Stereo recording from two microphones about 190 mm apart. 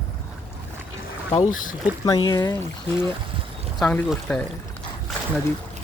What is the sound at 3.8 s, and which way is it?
Speech, 5° left (ahead or behind).